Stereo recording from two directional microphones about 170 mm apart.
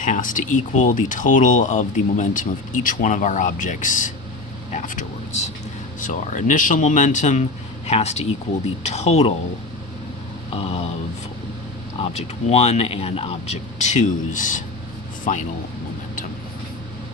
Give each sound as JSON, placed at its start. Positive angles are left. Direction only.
{"t": 0.0, "sound": "speech", "side_deg": 50}
{"t": 10.5, "sound": "speech", "side_deg": 35}
{"t": 11.9, "sound": "speech", "side_deg": 35}